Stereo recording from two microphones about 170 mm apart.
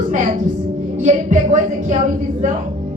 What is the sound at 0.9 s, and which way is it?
Music, 45° right (ahead or behind).